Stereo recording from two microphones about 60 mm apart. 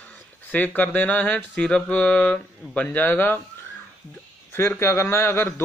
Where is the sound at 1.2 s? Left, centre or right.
Centre; by 3.3 s left.